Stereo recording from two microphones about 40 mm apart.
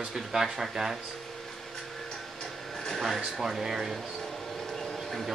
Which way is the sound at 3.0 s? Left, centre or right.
Centre.